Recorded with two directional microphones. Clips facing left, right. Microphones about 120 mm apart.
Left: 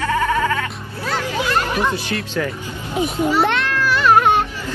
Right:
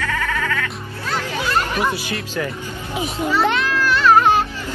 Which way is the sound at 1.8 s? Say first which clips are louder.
Left 1 dB; 10° right (ahead or behind).